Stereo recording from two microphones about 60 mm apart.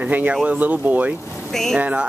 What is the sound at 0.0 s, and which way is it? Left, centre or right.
Speech, right.